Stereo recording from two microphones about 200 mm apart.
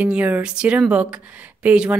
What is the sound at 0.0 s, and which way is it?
Speech, 5° right (ahead or behind).